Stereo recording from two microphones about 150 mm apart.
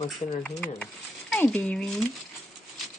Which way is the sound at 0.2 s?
45° left (ahead or behind).